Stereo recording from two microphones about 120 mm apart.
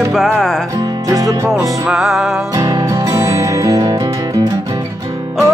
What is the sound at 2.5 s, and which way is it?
Music, 35° right (ahead or behind).